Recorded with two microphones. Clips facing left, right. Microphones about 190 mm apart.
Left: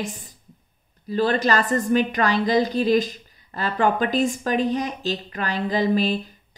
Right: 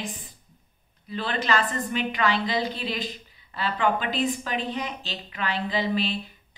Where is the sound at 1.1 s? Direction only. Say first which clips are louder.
Left 6 dB; 40° left (ahead or behind).